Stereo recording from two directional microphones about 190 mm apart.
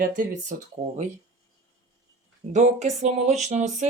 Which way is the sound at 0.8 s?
35° right (ahead or behind).